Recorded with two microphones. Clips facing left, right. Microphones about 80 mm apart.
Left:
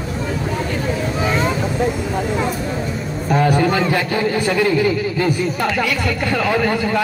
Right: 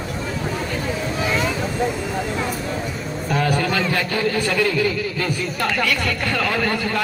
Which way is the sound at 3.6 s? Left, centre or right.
Left.